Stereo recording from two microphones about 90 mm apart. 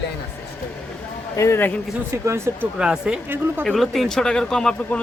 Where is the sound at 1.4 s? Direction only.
25° left (ahead or behind).